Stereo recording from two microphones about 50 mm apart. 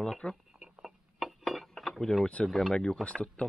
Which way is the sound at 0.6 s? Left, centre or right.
Centre.